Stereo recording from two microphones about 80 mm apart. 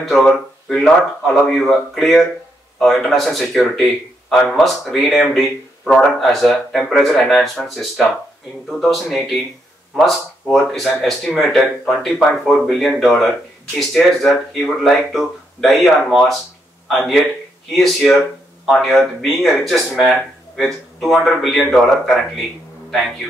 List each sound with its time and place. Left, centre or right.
0.0 s a man's voice: centre
18.7 s speech: centre